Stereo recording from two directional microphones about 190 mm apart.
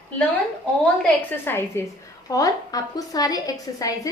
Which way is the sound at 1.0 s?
10° left (ahead or behind).